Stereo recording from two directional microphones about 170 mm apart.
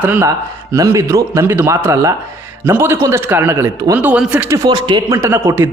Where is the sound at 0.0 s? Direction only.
15° right (ahead or behind).